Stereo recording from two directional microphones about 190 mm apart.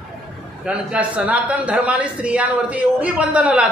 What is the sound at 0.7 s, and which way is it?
Speech, 5° right (ahead or behind).